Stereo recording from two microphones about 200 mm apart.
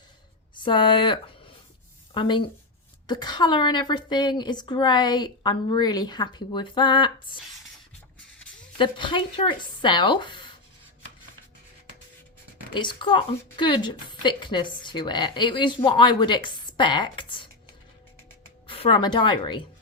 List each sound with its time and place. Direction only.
0.5 s a woman's voice: 25° left (ahead or behind)
8.8 s a woman's voice: 25° left (ahead or behind)
12.7 s a woman's voice: 25° left (ahead or behind)
18.7 s a woman's voice: 25° left (ahead or behind)